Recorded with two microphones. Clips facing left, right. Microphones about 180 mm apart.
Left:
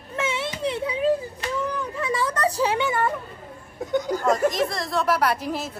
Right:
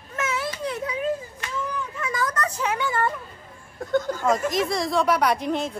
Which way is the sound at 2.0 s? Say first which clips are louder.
Left 3 dB; 30° left (ahead or behind).